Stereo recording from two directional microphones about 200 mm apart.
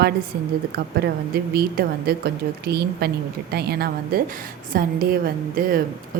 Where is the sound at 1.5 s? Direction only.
50° right (ahead or behind).